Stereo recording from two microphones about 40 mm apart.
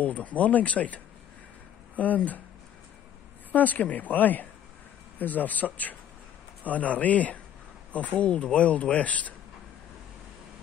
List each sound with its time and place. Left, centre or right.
0.0 s speech: left
3.5 s speech: left